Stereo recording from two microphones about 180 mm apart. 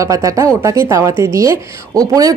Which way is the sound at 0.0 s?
20° right (ahead or behind).